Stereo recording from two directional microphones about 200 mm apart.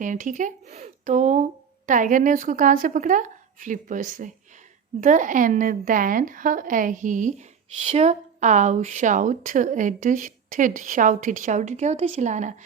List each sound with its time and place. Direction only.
0.0 s a woman's voice: 40° right (ahead or behind)